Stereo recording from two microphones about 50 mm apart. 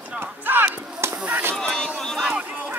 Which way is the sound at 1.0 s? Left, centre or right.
Right.